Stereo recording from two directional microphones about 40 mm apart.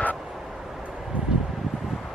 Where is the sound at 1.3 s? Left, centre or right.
Right.